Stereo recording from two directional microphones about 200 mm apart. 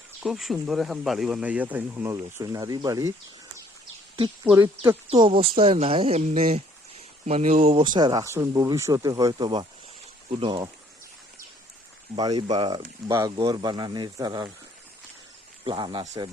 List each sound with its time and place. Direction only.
0.2 s speech: centre (ahead or behind); by 3.1 s 20° right (ahead or behind)
4.5 s speech: 15° right (ahead or behind)
5.0 s speech: 25° right (ahead or behind)
12.1 s speech: 20° right (ahead or behind)
15.6 s speech: 25° right (ahead or behind)